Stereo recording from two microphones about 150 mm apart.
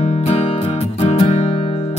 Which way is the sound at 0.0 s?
40° left (ahead or behind).